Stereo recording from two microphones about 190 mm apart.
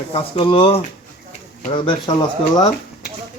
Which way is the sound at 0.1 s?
30° left (ahead or behind).